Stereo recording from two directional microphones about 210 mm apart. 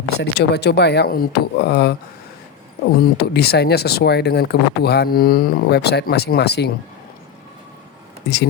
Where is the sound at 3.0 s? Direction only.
50° left (ahead or behind).